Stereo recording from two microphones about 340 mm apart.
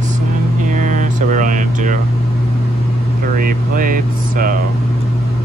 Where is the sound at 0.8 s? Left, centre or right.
Right.